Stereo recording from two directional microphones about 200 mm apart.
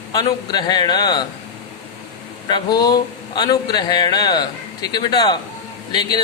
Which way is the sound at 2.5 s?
20° left (ahead or behind).